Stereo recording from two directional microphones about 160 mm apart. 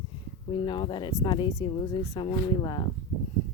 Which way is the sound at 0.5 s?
30° left (ahead or behind).